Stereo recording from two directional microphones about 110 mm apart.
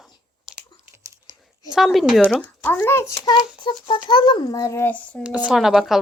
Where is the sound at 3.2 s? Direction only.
45° left (ahead or behind).